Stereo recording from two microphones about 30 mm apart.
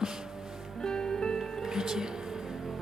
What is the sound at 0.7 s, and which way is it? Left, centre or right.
Music, left.